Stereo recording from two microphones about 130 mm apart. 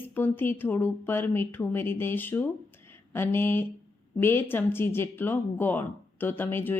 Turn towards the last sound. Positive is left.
turn(degrees=15)  # may be behind; listen again after turning